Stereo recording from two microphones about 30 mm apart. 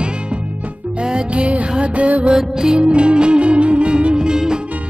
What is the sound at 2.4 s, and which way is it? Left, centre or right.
Music, centre.